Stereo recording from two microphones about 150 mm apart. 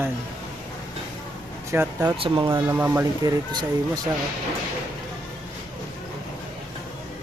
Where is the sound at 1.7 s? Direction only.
15° right (ahead or behind).